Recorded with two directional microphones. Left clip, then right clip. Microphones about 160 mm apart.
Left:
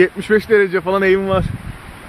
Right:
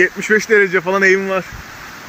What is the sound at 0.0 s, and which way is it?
Speech, 20° left (ahead or behind).